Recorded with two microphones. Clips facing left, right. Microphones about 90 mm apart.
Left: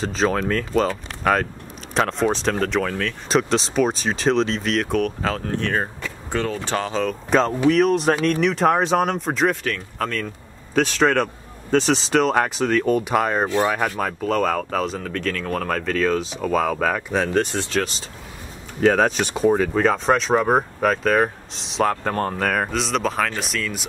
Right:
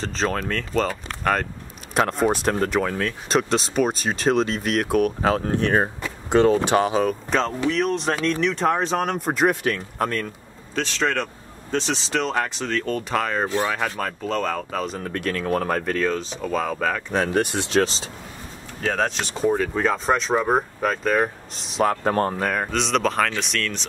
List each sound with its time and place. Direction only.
0.0 s speech: 5° left (ahead or behind); by 7.2 s 10° right (ahead or behind)
7.2 s speech: 5° left (ahead or behind)
9.6 s speech: 15° right (ahead or behind)
10.7 s speech: 15° left (ahead or behind)
15.0 s speech: 10° right (ahead or behind)
17.3 s speech: 10° right (ahead or behind)
17.6 s speech: 25° right (ahead or behind)
19.3 s speech: 10° left (ahead or behind)